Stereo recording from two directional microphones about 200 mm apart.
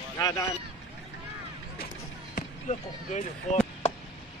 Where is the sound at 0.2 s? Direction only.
20° left (ahead or behind).